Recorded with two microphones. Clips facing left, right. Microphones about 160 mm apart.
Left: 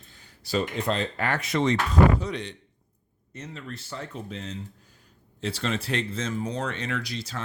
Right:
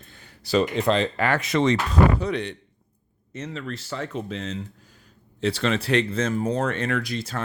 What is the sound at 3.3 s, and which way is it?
Speech, 90° right.